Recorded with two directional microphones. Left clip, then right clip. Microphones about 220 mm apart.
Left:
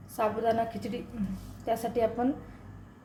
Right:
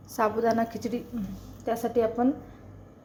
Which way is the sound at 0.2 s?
20° right (ahead or behind).